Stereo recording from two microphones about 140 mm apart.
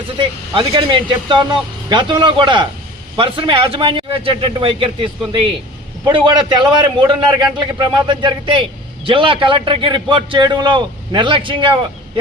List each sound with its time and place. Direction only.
0.2 s a man's voice: 40° right (ahead or behind)